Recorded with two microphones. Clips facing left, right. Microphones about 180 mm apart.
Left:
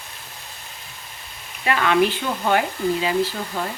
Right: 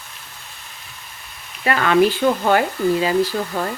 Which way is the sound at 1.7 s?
45° right (ahead or behind).